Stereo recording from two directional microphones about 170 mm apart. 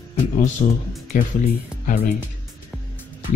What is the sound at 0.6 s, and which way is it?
Speech, 40° left (ahead or behind).